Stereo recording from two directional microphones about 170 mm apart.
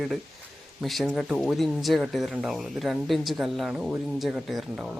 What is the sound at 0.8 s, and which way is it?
Speech, centre (ahead or behind).